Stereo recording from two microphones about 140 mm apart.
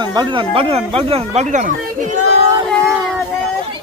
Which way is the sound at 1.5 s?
65° right (ahead or behind).